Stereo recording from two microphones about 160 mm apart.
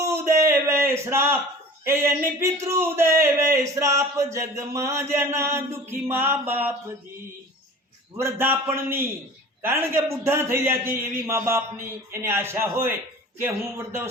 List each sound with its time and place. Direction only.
0.0 s a sound: 15° right (ahead or behind)
1.8 s a man's voice: 15° right (ahead or behind)
8.1 s a man's voice: 15° right (ahead or behind)